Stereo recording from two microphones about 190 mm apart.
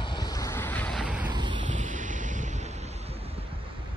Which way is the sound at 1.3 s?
25° right (ahead or behind).